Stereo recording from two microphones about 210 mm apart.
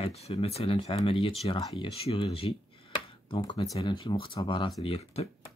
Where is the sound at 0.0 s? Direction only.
30° left (ahead or behind).